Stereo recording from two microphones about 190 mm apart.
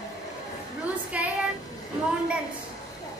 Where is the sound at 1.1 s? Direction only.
5° right (ahead or behind).